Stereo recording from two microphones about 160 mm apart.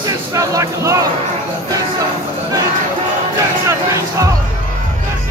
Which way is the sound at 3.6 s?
20° right (ahead or behind).